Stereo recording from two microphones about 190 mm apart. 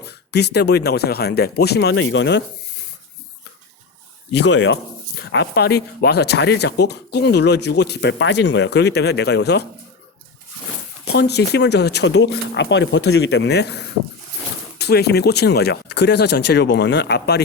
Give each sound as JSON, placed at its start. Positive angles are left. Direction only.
{"t": 0.0, "sound": "speech", "side_deg": 60}
{"t": 4.3, "sound": "speech", "side_deg": 65}
{"t": 11.0, "sound": "speech", "side_deg": 60}